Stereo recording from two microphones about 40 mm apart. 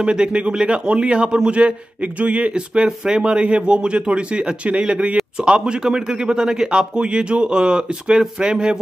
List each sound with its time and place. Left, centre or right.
0.0 s a man's voice: right